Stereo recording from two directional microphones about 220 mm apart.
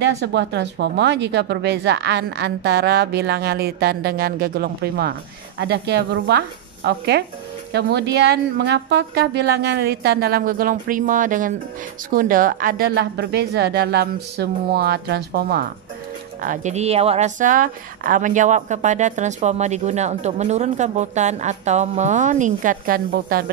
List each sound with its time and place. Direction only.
0.0 s a woman's voice: 50° right (ahead or behind)